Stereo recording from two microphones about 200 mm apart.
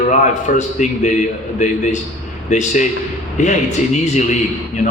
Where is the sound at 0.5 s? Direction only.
40° left (ahead or behind).